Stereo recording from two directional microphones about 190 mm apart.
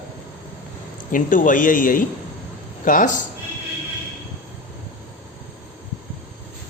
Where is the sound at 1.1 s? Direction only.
45° left (ahead or behind).